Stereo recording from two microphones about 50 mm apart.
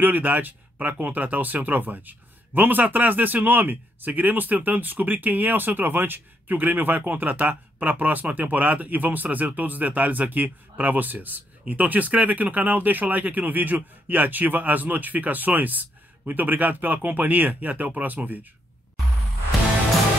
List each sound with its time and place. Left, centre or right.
0.0 s speech: right